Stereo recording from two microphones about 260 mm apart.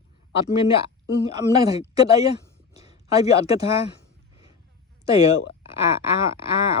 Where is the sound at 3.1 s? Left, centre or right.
Centre.